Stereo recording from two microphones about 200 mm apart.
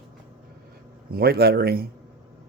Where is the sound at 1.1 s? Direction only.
50° right (ahead or behind).